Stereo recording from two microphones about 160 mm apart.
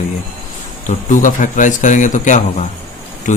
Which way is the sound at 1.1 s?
55° left (ahead or behind).